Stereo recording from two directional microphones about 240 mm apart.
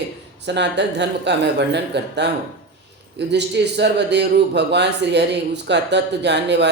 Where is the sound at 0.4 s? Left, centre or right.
Right.